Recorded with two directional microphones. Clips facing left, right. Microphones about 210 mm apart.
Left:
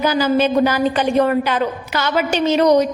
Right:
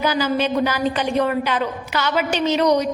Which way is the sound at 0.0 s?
45° left (ahead or behind).